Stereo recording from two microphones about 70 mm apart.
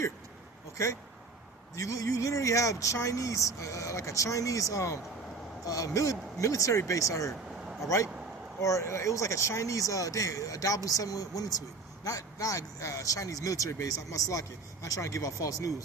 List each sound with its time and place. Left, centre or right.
1.7 s speech: left